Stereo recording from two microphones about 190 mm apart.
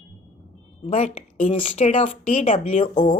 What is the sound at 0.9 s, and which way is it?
A woman's voice, 35° left (ahead or behind).